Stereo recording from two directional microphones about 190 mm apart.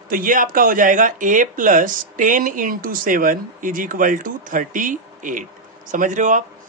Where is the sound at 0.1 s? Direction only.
45° right (ahead or behind).